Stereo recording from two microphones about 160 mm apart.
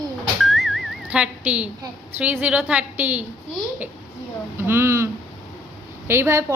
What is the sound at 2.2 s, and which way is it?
A woman's voice, 10° right (ahead or behind).